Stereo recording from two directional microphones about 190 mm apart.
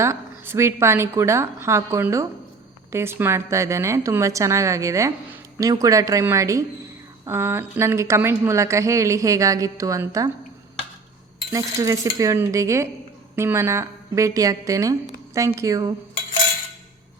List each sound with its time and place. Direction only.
0.0 s a woman's voice: 15° right (ahead or behind)
11.5 s a woman's voice: 15° right (ahead or behind)